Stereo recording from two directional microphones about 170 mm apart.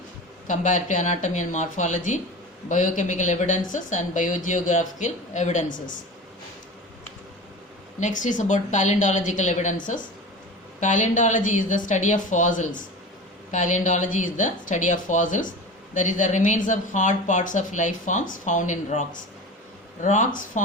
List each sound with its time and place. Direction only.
0.4 s speech: 50° left (ahead or behind)
7.9 s speech: 45° left (ahead or behind)